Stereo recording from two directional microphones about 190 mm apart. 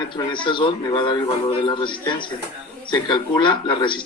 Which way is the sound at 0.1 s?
25° left (ahead or behind).